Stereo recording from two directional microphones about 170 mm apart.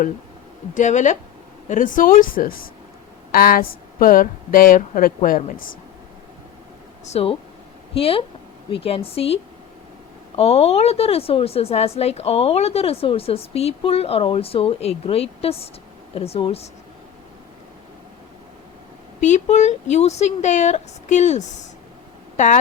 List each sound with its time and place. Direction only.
0.7 s speech: 45° left (ahead or behind)
7.0 s a woman's voice: 35° left (ahead or behind)
19.2 s speech: 45° left (ahead or behind)